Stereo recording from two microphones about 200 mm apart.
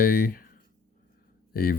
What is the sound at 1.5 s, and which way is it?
Speech, 45° left (ahead or behind).